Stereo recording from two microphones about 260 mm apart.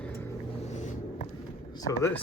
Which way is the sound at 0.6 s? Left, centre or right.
Left.